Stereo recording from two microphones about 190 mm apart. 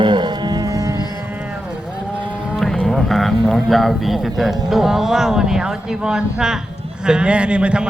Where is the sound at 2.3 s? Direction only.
5° right (ahead or behind).